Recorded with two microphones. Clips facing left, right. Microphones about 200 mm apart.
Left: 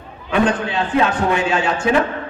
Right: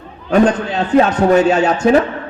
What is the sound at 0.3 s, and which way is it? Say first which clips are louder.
A man's voice: right 5 dB; 40° right (ahead or behind).